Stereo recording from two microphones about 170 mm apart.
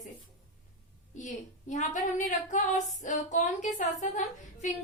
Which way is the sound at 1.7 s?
45° left (ahead or behind).